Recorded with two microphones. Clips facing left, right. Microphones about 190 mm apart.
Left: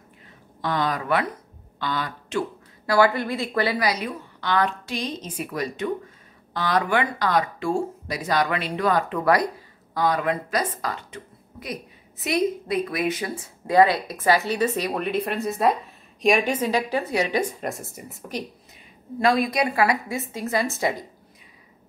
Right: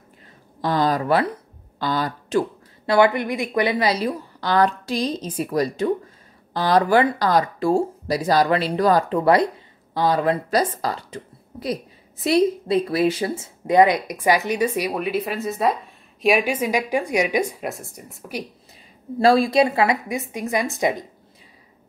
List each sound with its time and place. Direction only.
0.6 s speech: 35° right (ahead or behind)
2.9 s a woman's voice: 20° right (ahead or behind); by 18.2 s centre (ahead or behind)
19.1 s a woman's voice: 30° right (ahead or behind)